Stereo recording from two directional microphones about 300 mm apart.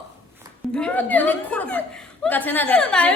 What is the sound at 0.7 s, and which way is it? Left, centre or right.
Speech, centre.